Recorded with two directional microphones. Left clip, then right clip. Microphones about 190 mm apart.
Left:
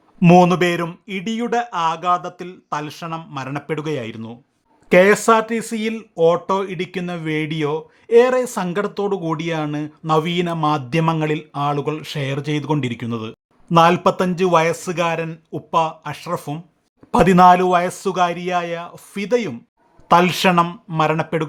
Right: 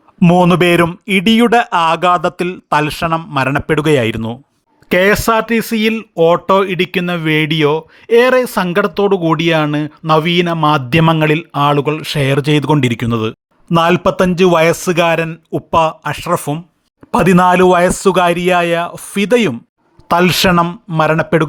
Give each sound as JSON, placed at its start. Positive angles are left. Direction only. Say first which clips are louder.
{"t": 0.3, "sound": "speech", "louder": "right 3 dB", "side_deg": -40}
{"t": 4.9, "sound": "speech", "louder": "right 1 dB", "side_deg": -30}
{"t": 19.3, "sound": "speech", "louder": "right 7 dB", "side_deg": -40}
{"t": 20.1, "sound": "speech", "louder": "right 3 dB", "side_deg": -30}